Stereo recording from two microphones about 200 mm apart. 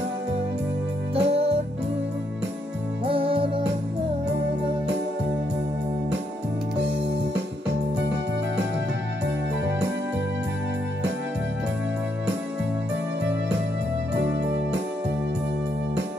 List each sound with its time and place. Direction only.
1.1 s music: 30° right (ahead or behind)
3.1 s music: 25° right (ahead or behind)
14.1 s keyboard: 60° right (ahead or behind)